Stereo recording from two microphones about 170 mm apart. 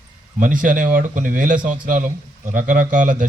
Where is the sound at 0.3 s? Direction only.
50° right (ahead or behind).